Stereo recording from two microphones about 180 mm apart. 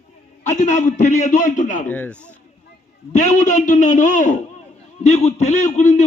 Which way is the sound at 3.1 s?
40° left (ahead or behind).